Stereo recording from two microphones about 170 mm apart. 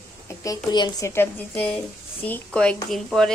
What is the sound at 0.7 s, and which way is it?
Speech, 25° left (ahead or behind).